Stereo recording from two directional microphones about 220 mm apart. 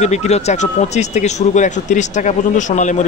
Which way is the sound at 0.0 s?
30° left (ahead or behind).